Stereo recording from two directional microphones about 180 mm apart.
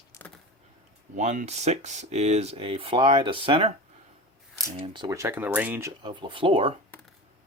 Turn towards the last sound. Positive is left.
turn(degrees=-30)  # may be behind; listen again after turning